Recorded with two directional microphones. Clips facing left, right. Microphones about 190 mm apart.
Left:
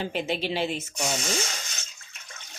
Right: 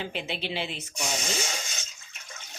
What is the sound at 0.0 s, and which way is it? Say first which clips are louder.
Speech: left 5 dB; 45° left (ahead or behind).